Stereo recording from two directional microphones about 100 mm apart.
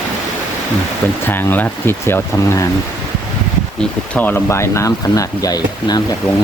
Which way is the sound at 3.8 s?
15° left (ahead or behind).